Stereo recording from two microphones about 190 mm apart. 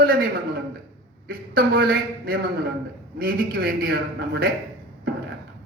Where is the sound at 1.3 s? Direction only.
50° right (ahead or behind).